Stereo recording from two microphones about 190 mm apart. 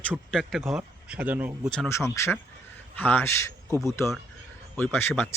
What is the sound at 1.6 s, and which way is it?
Speech, centre (ahead or behind).